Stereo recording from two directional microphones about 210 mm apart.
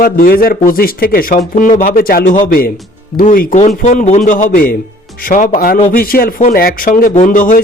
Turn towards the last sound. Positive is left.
turn(degrees=40)  # may be behind; listen again after turning